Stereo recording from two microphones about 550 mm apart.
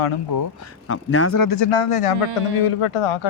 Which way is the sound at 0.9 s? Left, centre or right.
Left.